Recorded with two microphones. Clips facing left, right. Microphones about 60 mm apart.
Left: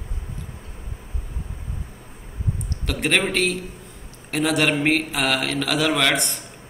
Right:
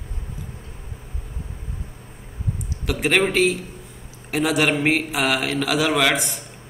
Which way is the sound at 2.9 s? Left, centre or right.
Centre.